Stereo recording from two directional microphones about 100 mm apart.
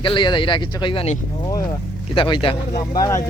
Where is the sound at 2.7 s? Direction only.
40° left (ahead or behind).